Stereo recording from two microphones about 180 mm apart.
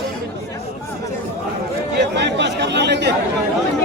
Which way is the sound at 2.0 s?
75° right (ahead or behind).